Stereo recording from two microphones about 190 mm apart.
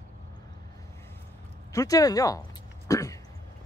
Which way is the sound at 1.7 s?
20° left (ahead or behind).